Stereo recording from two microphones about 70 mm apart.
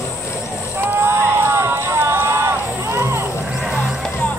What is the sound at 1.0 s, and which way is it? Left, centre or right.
Run, right.